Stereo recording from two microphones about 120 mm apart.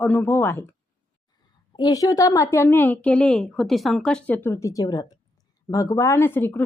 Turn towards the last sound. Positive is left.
turn(degrees=15)  # may be behind; listen again after turning